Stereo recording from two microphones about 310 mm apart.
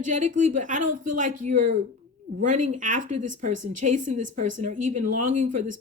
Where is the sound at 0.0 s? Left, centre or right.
Right.